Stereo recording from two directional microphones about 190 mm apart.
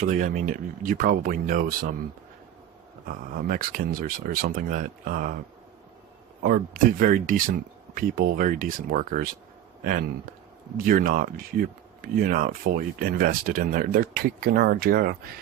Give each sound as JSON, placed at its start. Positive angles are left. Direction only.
{"t": 0.0, "sound": "speech", "side_deg": -45}
{"t": 3.1, "sound": "speech", "side_deg": -50}
{"t": 6.4, "sound": "speech", "side_deg": -45}
{"t": 10.8, "sound": "speech", "side_deg": -45}